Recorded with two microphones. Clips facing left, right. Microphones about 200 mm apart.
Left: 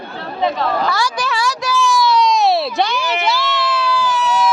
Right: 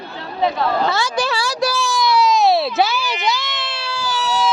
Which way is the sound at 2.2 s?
Centre (ahead or behind).